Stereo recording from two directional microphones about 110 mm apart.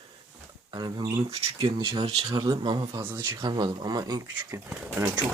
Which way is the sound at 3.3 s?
40° right (ahead or behind).